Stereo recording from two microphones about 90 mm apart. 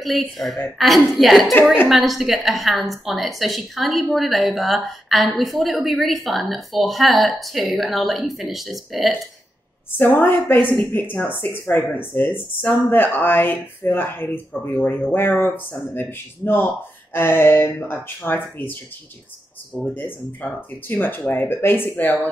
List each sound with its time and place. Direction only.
0.0 s a woman's voice: centre (ahead or behind)
9.9 s a woman's voice: 20° left (ahead or behind)
19.9 s a woman's voice: 20° left (ahead or behind)